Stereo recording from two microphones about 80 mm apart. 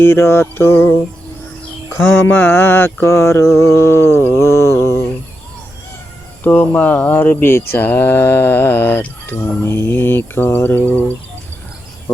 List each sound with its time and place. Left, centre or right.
0.0 s mantra: left
1.9 s a sound: left
6.4 s speech: left